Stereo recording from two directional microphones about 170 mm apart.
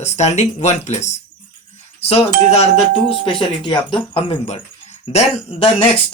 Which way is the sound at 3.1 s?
30° left (ahead or behind).